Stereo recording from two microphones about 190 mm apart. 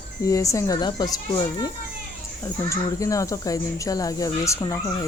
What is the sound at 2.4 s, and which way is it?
Speech, 15° left (ahead or behind).